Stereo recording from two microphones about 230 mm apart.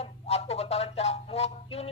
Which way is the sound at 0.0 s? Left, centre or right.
Left.